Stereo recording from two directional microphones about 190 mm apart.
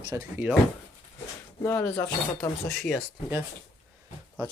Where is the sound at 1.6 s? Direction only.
15° left (ahead or behind).